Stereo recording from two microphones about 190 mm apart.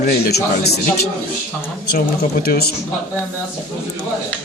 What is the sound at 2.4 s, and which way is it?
Speech, 55° left (ahead or behind).